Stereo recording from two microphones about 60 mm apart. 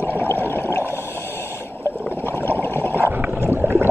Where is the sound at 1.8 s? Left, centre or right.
Left.